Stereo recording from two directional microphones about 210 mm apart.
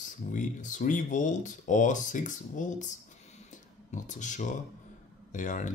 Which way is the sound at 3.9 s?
35° left (ahead or behind).